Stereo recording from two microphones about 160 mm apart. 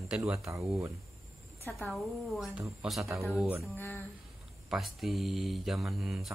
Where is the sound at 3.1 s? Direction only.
15° right (ahead or behind).